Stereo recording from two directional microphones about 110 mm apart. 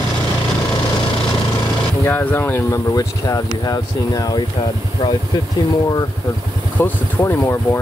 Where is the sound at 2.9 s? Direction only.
35° left (ahead or behind).